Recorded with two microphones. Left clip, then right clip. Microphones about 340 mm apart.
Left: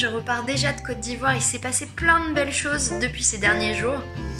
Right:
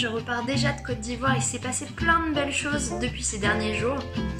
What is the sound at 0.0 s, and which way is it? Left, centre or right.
Speech, centre.